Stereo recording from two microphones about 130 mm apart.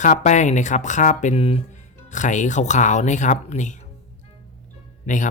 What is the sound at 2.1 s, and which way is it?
Speech, 70° left (ahead or behind).